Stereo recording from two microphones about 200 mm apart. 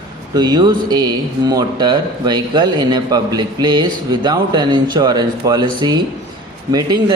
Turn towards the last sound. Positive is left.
turn(degrees=-20)  # may be behind; listen again after turning